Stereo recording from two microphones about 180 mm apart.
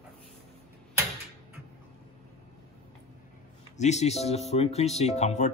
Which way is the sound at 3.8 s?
40° left (ahead or behind).